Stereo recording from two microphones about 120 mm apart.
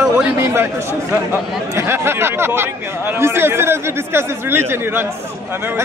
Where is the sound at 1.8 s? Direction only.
20° right (ahead or behind).